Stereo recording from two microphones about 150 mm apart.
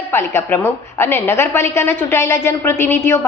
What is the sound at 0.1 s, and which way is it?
A woman's voice, 15° left (ahead or behind).